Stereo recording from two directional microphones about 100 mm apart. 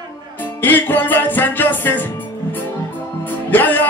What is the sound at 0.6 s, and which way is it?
Music, 20° left (ahead or behind).